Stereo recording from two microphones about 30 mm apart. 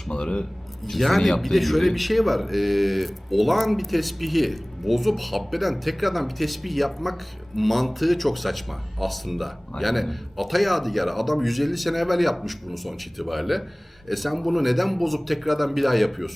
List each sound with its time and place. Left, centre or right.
0.1 s speech: left
0.9 s a man's voice: centre